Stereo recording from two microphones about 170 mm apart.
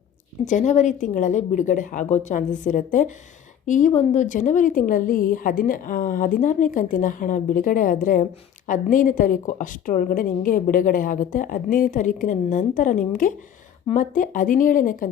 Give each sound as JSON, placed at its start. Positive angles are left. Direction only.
{"t": 0.4, "sound": "a woman's voice", "side_deg": 45}